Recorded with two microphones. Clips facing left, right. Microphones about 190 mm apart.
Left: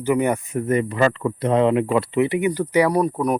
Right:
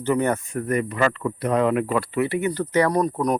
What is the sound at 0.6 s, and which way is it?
Speech, 30° left (ahead or behind).